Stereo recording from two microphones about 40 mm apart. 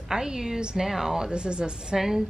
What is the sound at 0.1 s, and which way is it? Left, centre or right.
Speech, centre.